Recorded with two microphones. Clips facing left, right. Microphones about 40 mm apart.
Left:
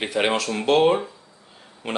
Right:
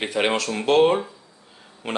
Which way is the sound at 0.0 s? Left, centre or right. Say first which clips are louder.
Even; centre.